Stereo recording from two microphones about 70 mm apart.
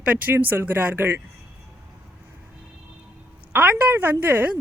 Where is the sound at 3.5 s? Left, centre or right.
Right.